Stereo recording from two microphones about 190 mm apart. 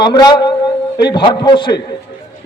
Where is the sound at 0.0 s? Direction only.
20° left (ahead or behind).